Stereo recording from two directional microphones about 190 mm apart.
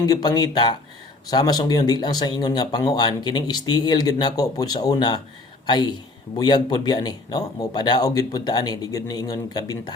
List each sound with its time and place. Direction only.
0.0 s speech: 20° left (ahead or behind)